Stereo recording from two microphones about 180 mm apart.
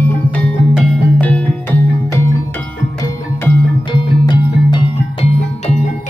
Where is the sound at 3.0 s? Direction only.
20° left (ahead or behind).